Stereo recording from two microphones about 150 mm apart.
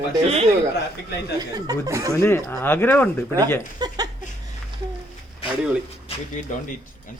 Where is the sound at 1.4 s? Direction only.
25° right (ahead or behind).